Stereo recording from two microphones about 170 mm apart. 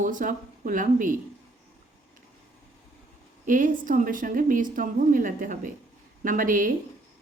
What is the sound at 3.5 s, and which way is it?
A woman's voice, 50° right (ahead or behind).